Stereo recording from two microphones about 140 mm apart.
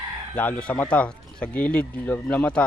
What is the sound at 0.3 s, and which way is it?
A man's voice, 10° left (ahead or behind).